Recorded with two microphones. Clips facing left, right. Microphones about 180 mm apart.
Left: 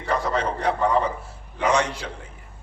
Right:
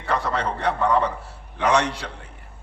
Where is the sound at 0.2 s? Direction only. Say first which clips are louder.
Left 1 dB; 65° right (ahead or behind).